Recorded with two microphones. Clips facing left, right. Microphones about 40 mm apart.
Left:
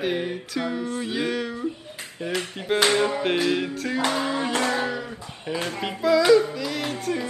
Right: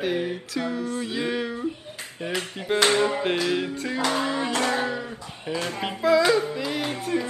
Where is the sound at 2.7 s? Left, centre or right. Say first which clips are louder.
Even; centre.